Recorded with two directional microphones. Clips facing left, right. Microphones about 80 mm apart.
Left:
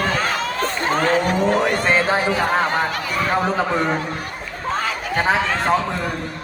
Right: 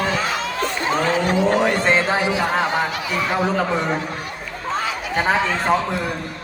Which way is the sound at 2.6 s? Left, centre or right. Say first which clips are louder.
Left 1 dB; left.